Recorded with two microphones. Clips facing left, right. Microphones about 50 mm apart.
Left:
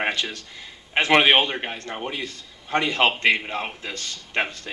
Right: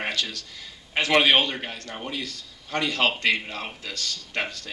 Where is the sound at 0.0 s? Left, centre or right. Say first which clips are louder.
Left 3 dB; left.